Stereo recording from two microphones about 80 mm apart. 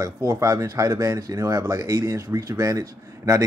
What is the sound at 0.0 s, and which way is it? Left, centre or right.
A man's voice, right.